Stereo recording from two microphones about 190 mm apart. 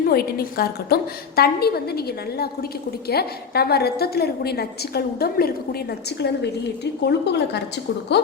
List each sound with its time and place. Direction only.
0.0 s a woman's voice: 55° left (ahead or behind)